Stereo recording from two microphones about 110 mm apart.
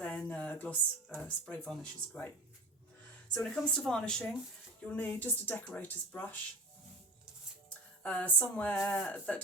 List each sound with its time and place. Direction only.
0.0 s speech: 15° left (ahead or behind)
3.3 s speech: 5° left (ahead or behind)
8.0 s speech: 15° left (ahead or behind)